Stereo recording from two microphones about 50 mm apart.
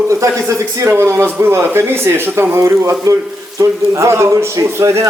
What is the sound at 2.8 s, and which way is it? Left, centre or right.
A man's voice, right.